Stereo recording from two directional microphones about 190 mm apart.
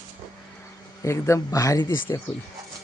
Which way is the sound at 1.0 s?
15° left (ahead or behind).